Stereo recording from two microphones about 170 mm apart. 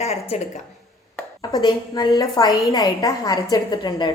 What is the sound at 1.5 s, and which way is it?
A woman's voice, 20° left (ahead or behind).